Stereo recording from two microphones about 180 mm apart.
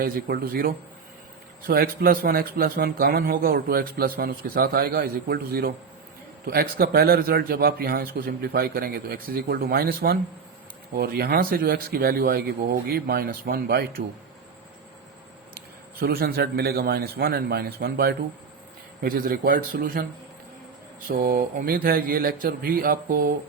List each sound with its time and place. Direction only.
0.0 s a man's voice: 55° right (ahead or behind)
16.0 s a man's voice: 55° right (ahead or behind)
21.2 s speech: 50° right (ahead or behind)